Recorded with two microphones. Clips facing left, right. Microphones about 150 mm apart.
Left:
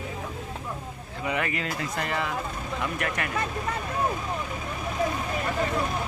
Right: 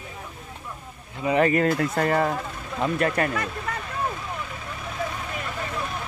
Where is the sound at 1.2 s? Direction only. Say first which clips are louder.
Right 9 dB; 35° right (ahead or behind).